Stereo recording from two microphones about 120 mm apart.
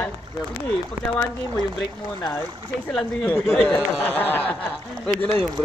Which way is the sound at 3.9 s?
15° left (ahead or behind).